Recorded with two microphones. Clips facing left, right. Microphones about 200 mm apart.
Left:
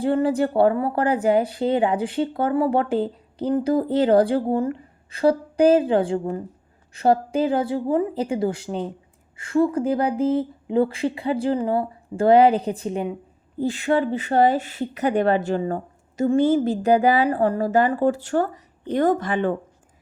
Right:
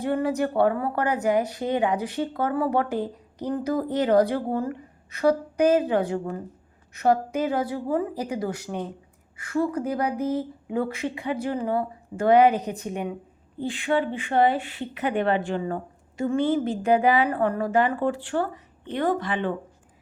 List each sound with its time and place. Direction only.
0.0 s speech: 30° left (ahead or behind)
13.6 s speech: 40° left (ahead or behind)